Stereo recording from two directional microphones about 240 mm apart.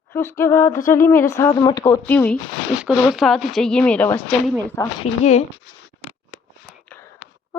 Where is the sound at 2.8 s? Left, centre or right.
Centre.